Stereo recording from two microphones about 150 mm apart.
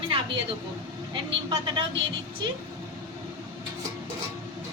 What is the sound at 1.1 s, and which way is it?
Vehicle, 35° right (ahead or behind).